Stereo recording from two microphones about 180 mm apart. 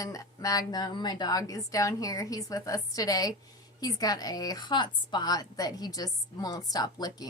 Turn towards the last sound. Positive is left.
turn(degrees=20)  # may be behind; listen again after turning